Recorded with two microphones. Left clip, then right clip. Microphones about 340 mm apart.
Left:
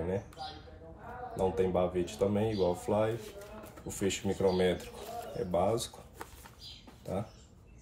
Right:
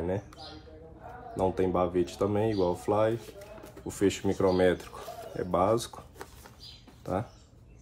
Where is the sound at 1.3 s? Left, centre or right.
Centre.